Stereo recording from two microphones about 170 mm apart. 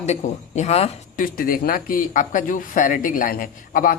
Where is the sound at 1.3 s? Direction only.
55° left (ahead or behind).